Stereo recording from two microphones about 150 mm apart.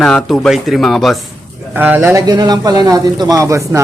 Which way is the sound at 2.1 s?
25° right (ahead or behind).